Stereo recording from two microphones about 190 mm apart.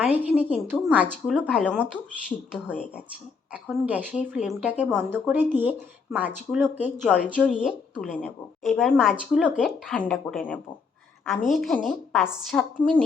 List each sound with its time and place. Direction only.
0.0 s a woman's voice: 10° right (ahead or behind)